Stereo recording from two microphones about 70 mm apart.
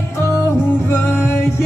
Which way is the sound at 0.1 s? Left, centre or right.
Left.